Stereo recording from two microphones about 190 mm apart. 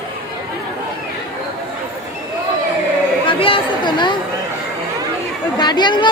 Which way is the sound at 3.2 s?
30° left (ahead or behind).